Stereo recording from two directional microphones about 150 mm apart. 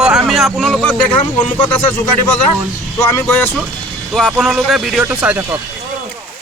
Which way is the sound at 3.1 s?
15° left (ahead or behind).